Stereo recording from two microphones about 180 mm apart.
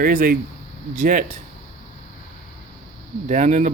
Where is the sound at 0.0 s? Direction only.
50° right (ahead or behind).